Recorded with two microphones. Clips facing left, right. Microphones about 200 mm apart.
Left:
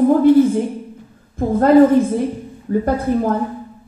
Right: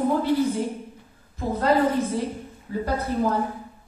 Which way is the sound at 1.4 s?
50° left (ahead or behind).